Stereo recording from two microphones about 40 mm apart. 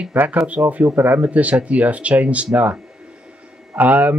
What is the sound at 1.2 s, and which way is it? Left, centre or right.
Speech, right.